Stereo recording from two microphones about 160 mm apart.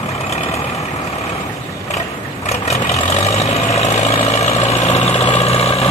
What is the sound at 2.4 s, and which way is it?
Vehicle, 45° left (ahead or behind).